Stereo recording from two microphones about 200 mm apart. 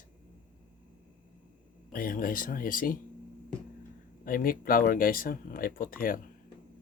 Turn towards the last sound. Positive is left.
turn(degrees=45)  # may be behind; listen again after turning